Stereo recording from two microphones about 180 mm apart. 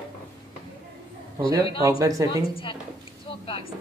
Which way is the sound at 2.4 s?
30° left (ahead or behind).